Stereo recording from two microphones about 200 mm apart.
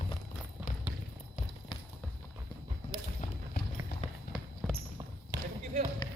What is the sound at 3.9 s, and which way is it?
Music, 55° left (ahead or behind).